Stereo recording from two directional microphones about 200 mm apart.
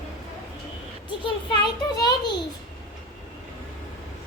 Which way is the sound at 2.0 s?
20° left (ahead or behind).